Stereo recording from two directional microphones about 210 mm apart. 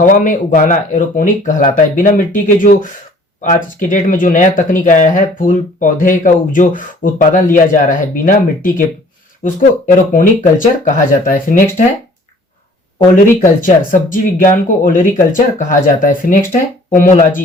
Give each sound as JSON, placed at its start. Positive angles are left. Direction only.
{"t": 0.0, "sound": "speech", "side_deg": 40}
{"t": 13.1, "sound": "speech", "side_deg": 40}